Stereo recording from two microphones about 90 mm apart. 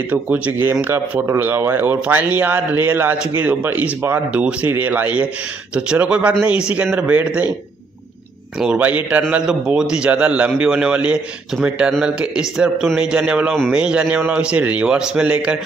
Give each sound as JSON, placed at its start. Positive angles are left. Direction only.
{"t": 0.1, "sound": "a man's voice", "side_deg": -15}
{"t": 8.5, "sound": "a man's voice", "side_deg": -15}